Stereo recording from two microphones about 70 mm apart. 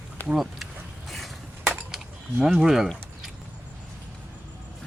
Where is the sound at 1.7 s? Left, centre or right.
Centre.